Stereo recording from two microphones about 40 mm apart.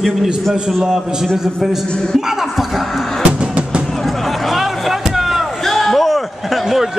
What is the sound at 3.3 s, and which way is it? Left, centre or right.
Music, right.